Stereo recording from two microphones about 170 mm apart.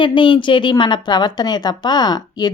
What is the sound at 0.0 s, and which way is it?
A woman's voice, 30° left (ahead or behind).